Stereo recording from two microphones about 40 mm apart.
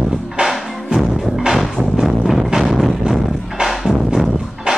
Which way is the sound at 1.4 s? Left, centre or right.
Centre.